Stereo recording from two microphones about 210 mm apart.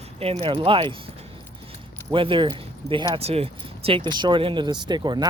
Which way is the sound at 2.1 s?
25° right (ahead or behind).